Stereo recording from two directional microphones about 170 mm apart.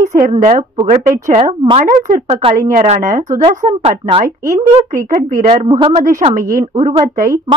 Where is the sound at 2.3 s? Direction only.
35° right (ahead or behind).